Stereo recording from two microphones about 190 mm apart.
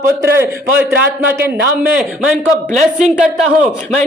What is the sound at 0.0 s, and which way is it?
A man's voice, 15° right (ahead or behind).